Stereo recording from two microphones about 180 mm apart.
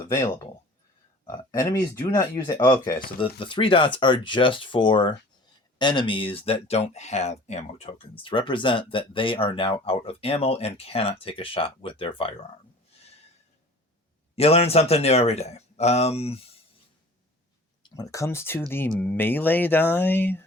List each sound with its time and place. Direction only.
0.0 s speech: 15° left (ahead or behind)
1.3 s speech: 20° left (ahead or behind)
3.2 s speech: 30° left (ahead or behind)
14.3 s speech: 35° left (ahead or behind)
17.9 s speech: 20° left (ahead or behind)